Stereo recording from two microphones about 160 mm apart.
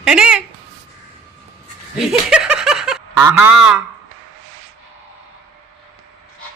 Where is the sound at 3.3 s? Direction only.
10° right (ahead or behind).